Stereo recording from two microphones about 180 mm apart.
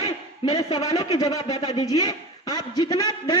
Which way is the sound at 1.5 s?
35° left (ahead or behind).